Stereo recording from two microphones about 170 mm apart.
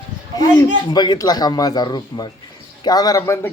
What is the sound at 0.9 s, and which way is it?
Speech, 25° left (ahead or behind).